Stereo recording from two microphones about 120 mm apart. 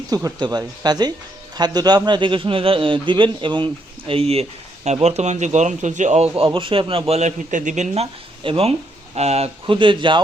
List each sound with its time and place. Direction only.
0.1 s speech: 25° right (ahead or behind)
0.3 s a man's voice: 35° right (ahead or behind)
7.1 s a man's voice: 75° right (ahead or behind)
8.4 s a man's voice: 50° right (ahead or behind)
9.1 s speech: 60° right (ahead or behind)
9.7 s a man's voice: 45° right (ahead or behind)